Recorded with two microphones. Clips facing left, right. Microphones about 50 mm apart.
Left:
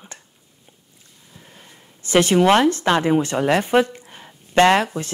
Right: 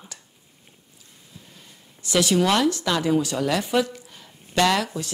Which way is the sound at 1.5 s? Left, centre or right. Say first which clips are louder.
Left 3 dB; left.